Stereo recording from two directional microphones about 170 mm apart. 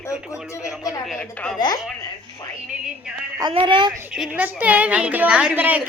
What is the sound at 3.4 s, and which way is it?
Speech, 30° right (ahead or behind).